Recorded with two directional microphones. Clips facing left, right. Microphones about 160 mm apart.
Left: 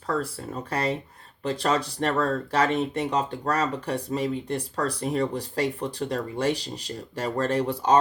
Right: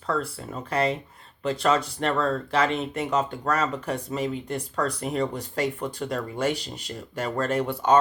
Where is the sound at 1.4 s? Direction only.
35° left (ahead or behind).